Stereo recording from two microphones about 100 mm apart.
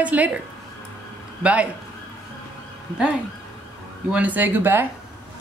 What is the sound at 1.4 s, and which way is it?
Speech, 15° right (ahead or behind).